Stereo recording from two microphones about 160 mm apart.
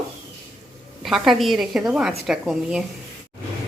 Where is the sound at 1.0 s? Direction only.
Centre (ahead or behind).